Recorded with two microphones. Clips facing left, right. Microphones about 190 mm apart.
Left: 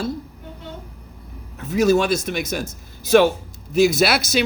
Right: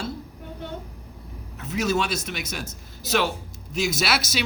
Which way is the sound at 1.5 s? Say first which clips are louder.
Left 8 dB; 50° left (ahead or behind).